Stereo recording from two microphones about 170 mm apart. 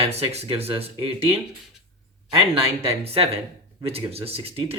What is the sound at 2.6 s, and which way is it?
Speech, 35° right (ahead or behind).